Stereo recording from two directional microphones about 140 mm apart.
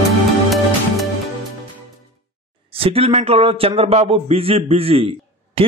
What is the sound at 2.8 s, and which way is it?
A man's voice, 45° right (ahead or behind).